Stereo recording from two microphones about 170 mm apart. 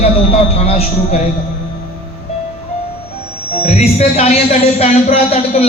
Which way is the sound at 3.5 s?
40° left (ahead or behind).